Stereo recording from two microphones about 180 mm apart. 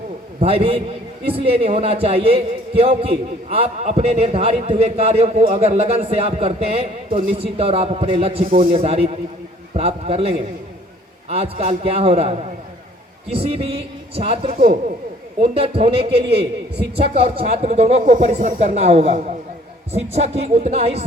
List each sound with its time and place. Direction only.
0.3 s a man's voice: 35° right (ahead or behind)
15.5 s a man's voice: 30° right (ahead or behind)
16.2 s a man's voice: 65° right (ahead or behind)
17.3 s a man's voice: 40° right (ahead or behind)